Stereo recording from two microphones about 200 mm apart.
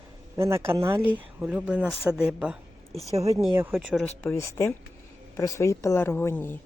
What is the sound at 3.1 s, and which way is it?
Speech, 15° right (ahead or behind).